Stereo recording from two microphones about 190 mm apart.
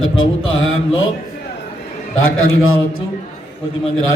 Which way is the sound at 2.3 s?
90° left.